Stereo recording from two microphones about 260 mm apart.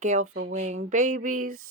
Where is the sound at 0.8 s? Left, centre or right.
Right.